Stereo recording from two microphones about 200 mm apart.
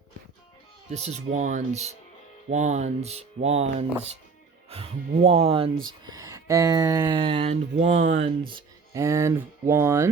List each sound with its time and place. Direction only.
0.9 s speech: 35° right (ahead or behind)
5.8 s speech: 20° right (ahead or behind); by 8.3 s 35° right (ahead or behind)
8.5 s speech: 15° right (ahead or behind)